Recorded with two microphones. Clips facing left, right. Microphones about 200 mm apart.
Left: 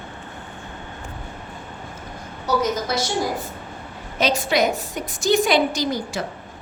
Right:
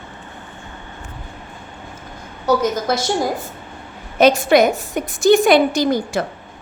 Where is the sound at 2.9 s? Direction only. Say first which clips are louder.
Right 4 dB; 50° right (ahead or behind).